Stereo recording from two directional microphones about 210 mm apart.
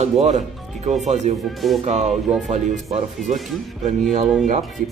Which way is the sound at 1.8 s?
30° right (ahead or behind).